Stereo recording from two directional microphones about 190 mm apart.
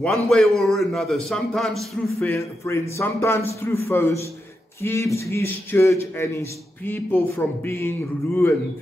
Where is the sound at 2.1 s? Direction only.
15° left (ahead or behind).